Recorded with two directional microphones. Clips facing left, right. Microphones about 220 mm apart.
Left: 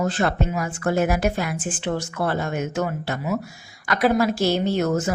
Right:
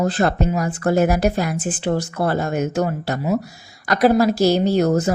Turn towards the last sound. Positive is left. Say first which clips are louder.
# right 4 dB
turn(degrees=-35)  # may be behind; listen again after turning